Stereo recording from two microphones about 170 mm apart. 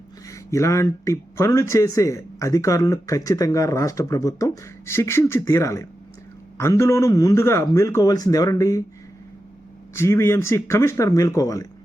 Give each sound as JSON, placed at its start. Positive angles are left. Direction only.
{"t": 0.3, "sound": "speech", "side_deg": 15}
{"t": 9.9, "sound": "speech", "side_deg": 15}